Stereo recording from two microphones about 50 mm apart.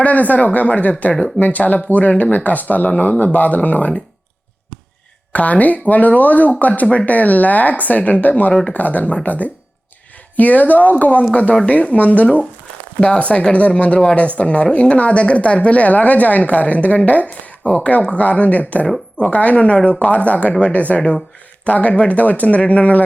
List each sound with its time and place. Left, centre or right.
0.0 s speech: left
5.3 s speech: left